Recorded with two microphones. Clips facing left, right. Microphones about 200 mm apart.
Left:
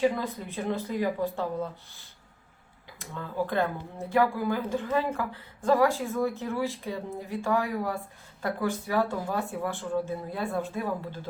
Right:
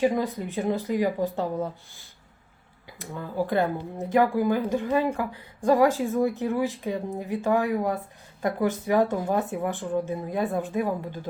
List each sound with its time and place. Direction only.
0.0 s a woman's voice: 15° right (ahead or behind)
3.4 s a woman's voice: 15° right (ahead or behind)